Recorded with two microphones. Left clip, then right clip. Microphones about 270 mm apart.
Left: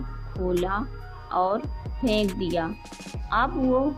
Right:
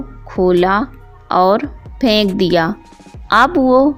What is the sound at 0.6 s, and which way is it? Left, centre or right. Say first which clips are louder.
Speech: right 14 dB; right.